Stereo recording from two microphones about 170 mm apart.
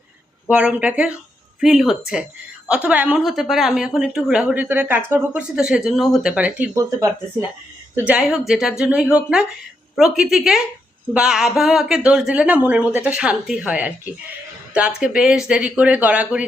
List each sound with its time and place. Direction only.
0.5 s a woman's voice: 5° right (ahead or behind)
6.7 s speech: 20° right (ahead or behind)
7.9 s a woman's voice: 10° right (ahead or behind)